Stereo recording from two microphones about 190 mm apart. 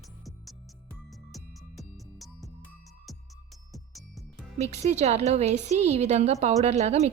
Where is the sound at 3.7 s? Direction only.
Centre (ahead or behind).